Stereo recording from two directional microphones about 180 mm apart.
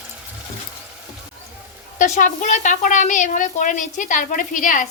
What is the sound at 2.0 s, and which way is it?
A woman's voice, 45° left (ahead or behind).